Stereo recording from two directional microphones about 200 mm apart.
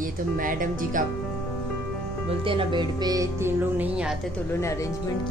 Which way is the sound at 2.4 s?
25° right (ahead or behind).